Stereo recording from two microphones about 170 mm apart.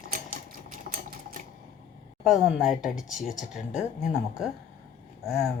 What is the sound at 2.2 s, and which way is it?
Speech, 5° right (ahead or behind).